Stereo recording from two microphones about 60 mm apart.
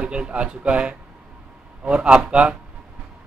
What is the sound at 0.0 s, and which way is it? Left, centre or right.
A man's voice, centre.